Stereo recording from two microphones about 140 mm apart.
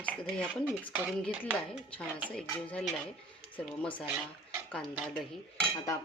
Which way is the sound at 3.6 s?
10° left (ahead or behind).